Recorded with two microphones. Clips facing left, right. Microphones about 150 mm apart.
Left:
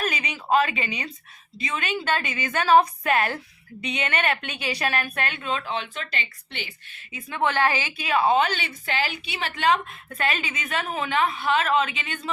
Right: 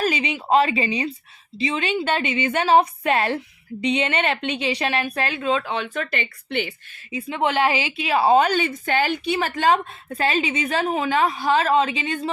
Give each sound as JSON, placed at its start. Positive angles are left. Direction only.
{"t": 0.0, "sound": "a woman's voice", "side_deg": -30}
{"t": 7.3, "sound": "a woman's voice", "side_deg": -20}